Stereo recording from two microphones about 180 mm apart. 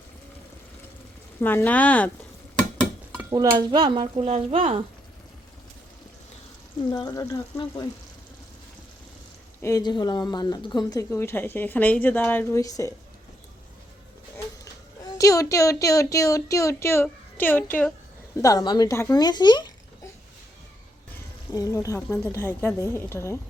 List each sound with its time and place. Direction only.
1.4 s speech: 10° left (ahead or behind)
3.2 s stir: 20° right (ahead or behind)
6.9 s speech: 20° left (ahead or behind)
9.6 s speech: 15° left (ahead or behind)
15.2 s speech: 20° left (ahead or behind)
21.5 s speech: 15° left (ahead or behind)